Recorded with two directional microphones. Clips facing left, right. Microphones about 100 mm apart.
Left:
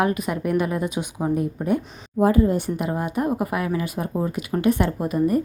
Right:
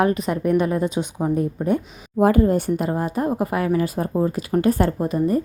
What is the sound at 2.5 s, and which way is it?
A woman's voice, 45° right (ahead or behind).